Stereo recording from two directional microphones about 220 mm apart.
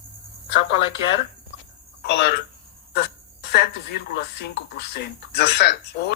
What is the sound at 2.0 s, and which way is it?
Speech, 45° left (ahead or behind).